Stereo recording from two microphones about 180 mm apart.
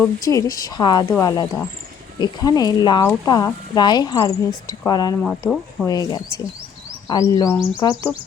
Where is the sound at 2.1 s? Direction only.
25° left (ahead or behind).